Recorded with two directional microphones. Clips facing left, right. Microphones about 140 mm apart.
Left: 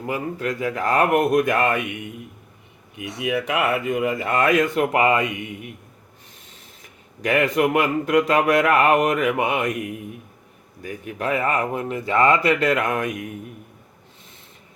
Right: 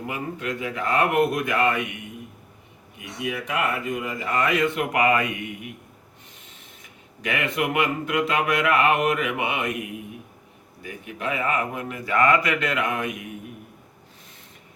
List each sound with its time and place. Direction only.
0.1 s speech: 40° left (ahead or behind)
3.2 s speech: 75° left (ahead or behind); by 4.5 s 60° left (ahead or behind)
4.7 s speech: 35° left (ahead or behind)
7.2 s a man's voice: 40° left (ahead or behind)
11.2 s a man's voice: 40° left (ahead or behind)